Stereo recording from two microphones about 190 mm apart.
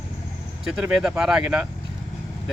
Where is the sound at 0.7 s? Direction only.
5° right (ahead or behind).